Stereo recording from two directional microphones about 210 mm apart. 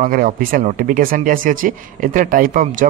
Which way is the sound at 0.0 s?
40° right (ahead or behind).